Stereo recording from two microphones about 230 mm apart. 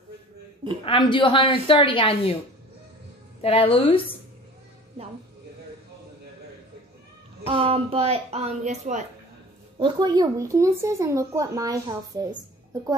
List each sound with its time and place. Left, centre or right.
0.8 s a woman's voice: left
3.4 s a woman's voice: left
7.4 s a woman's voice: right
9.8 s speech: centre